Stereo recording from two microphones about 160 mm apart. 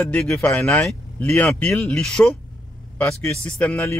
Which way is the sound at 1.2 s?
15° left (ahead or behind).